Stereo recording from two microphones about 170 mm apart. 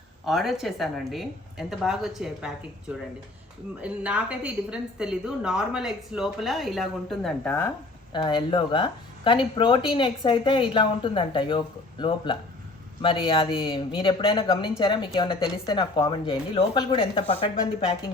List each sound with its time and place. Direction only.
0.3 s a woman's voice: centre (ahead or behind)
3.8 s a woman's voice: 5° right (ahead or behind); by 7.7 s 10° left (ahead or behind)
8.1 s speech: 25° left (ahead or behind)